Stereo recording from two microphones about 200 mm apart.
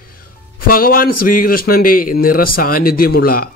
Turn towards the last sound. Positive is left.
turn(degrees=45)  # may be behind; listen again after turning